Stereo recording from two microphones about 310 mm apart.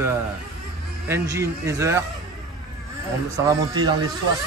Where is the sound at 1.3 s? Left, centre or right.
Centre.